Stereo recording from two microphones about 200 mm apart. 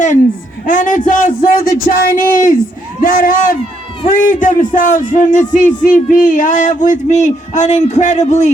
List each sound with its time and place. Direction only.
0.6 s speech: 40° left (ahead or behind)